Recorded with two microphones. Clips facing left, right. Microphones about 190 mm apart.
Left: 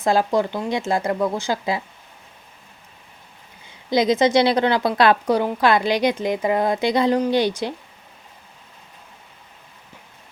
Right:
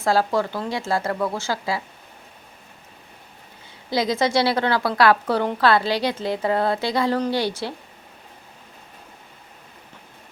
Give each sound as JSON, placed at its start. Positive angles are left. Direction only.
{"t": 0.0, "sound": "a woman's voice", "side_deg": 20}
{"t": 3.8, "sound": "a woman's voice", "side_deg": 20}